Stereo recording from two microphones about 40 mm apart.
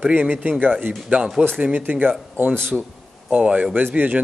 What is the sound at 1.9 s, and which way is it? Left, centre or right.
Speech, right.